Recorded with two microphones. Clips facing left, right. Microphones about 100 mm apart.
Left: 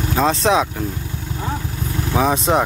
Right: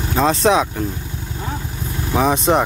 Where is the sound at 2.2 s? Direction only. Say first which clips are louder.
Right 1 dB; centre (ahead or behind).